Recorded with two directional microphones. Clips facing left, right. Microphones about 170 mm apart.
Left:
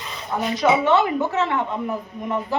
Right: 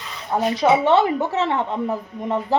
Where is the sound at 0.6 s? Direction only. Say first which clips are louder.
Right 1 dB; 30° right (ahead or behind).